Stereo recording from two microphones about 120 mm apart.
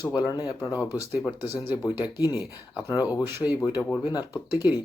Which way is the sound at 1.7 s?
35° left (ahead or behind).